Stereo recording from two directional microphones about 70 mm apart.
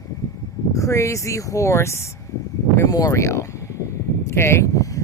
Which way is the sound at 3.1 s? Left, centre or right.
Left.